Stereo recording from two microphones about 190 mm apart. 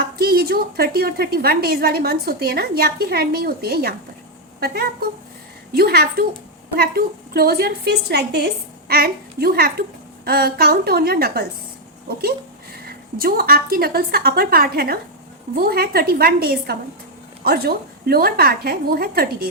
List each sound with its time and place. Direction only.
0.2 s a woman's voice: 55° right (ahead or behind)
12.7 s a woman's voice: 55° right (ahead or behind)